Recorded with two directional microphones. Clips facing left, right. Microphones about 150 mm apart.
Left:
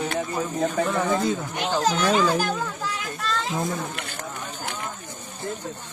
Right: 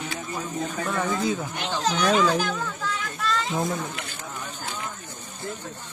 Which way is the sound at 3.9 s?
60° left (ahead or behind).